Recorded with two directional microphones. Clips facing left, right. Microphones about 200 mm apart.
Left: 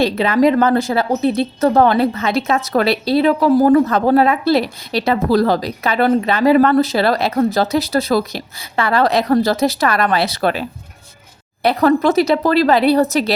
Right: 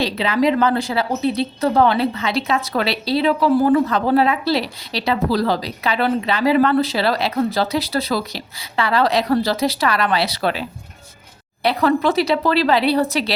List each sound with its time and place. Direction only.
0.0 s speech: 50° left (ahead or behind)